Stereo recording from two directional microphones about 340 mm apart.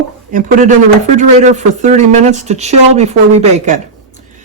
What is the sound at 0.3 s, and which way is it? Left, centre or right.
Speech, right.